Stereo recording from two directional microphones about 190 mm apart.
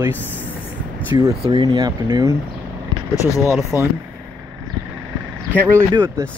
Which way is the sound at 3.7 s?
15° left (ahead or behind).